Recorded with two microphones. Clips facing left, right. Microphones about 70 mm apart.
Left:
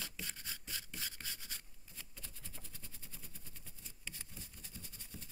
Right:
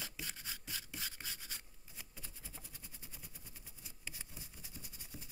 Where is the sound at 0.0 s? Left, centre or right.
Centre.